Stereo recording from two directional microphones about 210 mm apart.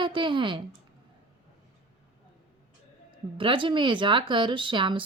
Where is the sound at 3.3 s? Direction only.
25° right (ahead or behind).